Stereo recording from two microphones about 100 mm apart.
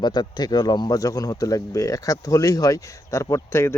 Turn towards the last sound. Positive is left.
turn(degrees=25)  # may be behind; listen again after turning